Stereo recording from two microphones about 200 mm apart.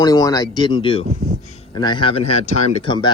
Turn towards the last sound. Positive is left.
turn(degrees=20)  # may be behind; listen again after turning